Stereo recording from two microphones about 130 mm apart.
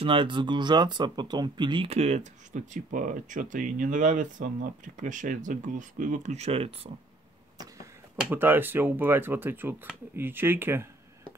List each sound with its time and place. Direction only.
0.0 s speech: 40° right (ahead or behind)
1.9 s speech: 55° right (ahead or behind)
7.5 s a sound: 30° right (ahead or behind)
8.2 s speech: 15° right (ahead or behind)